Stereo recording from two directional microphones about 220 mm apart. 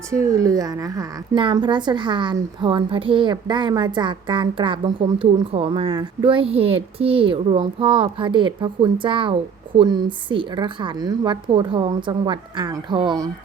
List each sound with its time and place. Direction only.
0.1 s a woman's voice: 15° right (ahead or behind)